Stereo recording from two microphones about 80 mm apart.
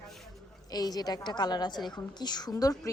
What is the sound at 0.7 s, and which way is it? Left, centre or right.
A woman's voice, left.